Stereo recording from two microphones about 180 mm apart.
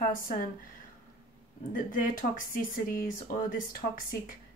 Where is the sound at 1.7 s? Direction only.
50° left (ahead or behind).